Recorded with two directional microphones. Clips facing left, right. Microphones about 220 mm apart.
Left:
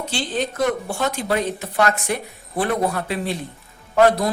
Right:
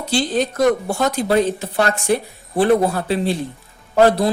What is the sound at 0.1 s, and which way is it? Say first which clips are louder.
A man's voice: right 8 dB; 40° right (ahead or behind).